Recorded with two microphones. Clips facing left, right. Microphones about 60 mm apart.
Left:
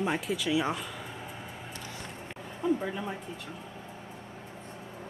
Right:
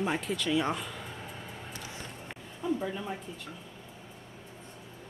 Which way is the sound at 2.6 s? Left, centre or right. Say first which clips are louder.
Left 3 dB; centre.